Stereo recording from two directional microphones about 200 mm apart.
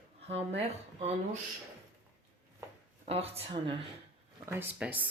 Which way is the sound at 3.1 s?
30° right (ahead or behind).